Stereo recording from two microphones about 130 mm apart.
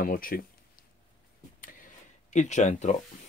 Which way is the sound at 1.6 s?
80° left.